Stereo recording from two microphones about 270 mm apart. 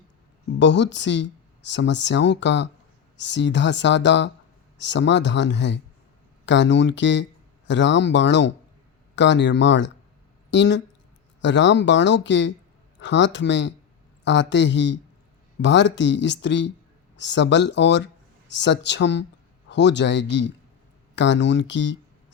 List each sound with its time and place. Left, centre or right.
0.6 s speech: left